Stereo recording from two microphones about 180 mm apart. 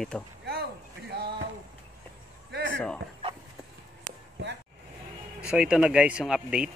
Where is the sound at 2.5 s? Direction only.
75° right (ahead or behind).